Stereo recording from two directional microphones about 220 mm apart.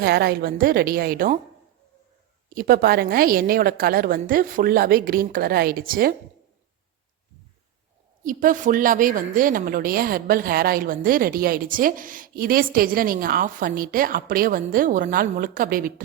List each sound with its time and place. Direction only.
0.0 s a woman's voice: 45° right (ahead or behind)
2.6 s a woman's voice: 40° right (ahead or behind)
8.2 s a woman's voice: 40° right (ahead or behind)